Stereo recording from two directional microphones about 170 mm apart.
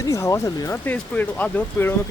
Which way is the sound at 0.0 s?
20° left (ahead or behind).